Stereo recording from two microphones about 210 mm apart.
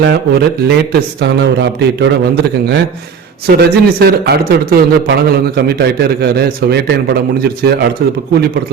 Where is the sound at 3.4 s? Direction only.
50° right (ahead or behind).